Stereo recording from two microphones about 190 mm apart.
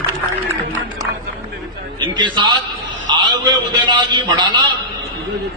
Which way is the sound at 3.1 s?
25° right (ahead or behind).